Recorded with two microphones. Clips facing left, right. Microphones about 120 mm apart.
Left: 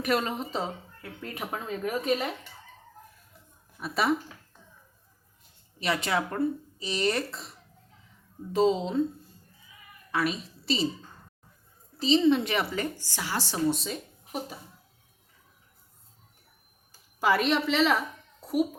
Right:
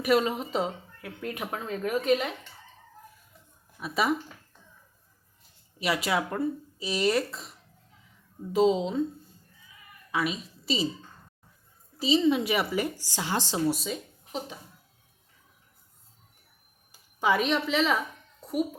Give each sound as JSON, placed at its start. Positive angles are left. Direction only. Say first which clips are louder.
{"t": 0.0, "sound": "speech", "louder": "right 3 dB", "side_deg": -5}
{"t": 3.8, "sound": "speech", "louder": "even", "side_deg": 0}
{"t": 5.8, "sound": "speech", "louder": "right 1 dB", "side_deg": -5}
{"t": 8.5, "sound": "a woman's voice", "louder": "right 1 dB", "side_deg": 0}
{"t": 11.9, "sound": "speech", "louder": "left 1 dB", "side_deg": -5}
{"t": 13.1, "sound": "a woman's voice", "louder": "right 2 dB", "side_deg": -20}
{"t": 13.7, "sound": "speech", "louder": "even", "side_deg": 0}
{"t": 17.2, "sound": "speech", "louder": "left 1 dB", "side_deg": 0}
{"t": 18.3, "sound": "a sound", "louder": "left 2 dB", "side_deg": 5}